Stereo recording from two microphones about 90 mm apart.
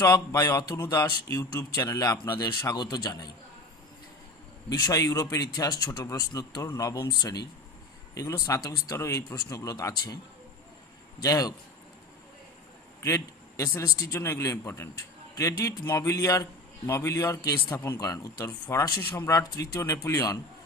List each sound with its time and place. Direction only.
0.0 s a man's voice: 40° left (ahead or behind)
0.8 s speech: 30° left (ahead or behind)
1.3 s a man's voice: 40° left (ahead or behind)
4.7 s a man's voice: 45° left (ahead or behind)
11.2 s a man's voice: 40° left (ahead or behind)
13.0 s a man's voice: 35° left (ahead or behind)